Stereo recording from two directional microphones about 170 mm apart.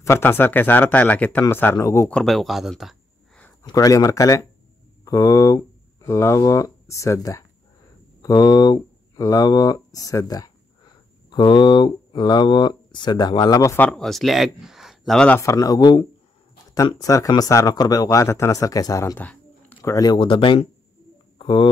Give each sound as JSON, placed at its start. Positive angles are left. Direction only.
{"t": 0.0, "sound": "speech", "side_deg": 15}
{"t": 2.1, "sound": "speech", "side_deg": 0}
{"t": 3.6, "sound": "speech", "side_deg": 20}
{"t": 21.4, "sound": "a sound", "side_deg": 25}